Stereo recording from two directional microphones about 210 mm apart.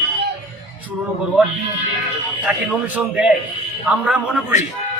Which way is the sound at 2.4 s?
5° right (ahead or behind).